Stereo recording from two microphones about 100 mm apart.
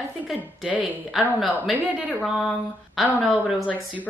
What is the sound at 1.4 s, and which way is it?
Speech, 5° right (ahead or behind).